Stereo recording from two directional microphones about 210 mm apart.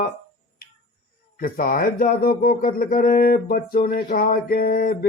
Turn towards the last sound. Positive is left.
turn(degrees=45)  # may be behind; listen again after turning